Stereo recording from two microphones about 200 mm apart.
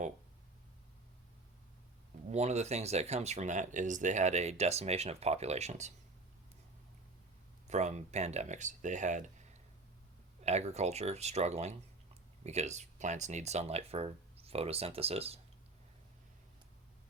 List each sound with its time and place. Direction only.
2.3 s speech: 35° right (ahead or behind)
7.7 s speech: 35° right (ahead or behind)